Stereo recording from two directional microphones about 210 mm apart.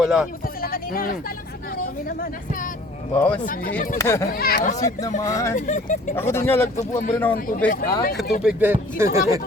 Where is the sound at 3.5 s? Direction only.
45° left (ahead or behind).